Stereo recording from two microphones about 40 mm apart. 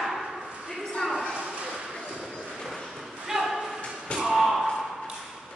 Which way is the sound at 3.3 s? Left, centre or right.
Centre.